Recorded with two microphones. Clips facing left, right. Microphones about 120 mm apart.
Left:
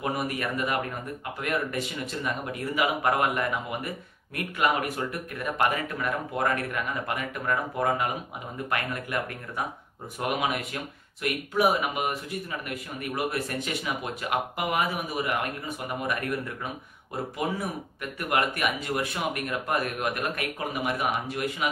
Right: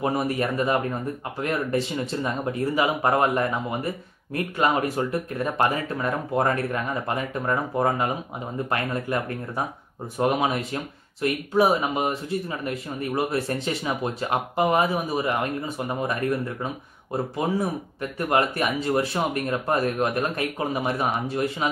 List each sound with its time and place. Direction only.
0.0 s speech: 30° right (ahead or behind)
18.3 s speech: 30° right (ahead or behind)